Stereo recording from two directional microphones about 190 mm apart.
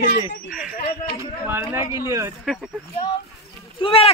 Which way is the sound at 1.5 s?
15° right (ahead or behind).